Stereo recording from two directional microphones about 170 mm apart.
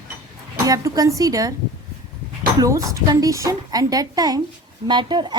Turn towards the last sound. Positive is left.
turn(degrees=-25)  # may be behind; listen again after turning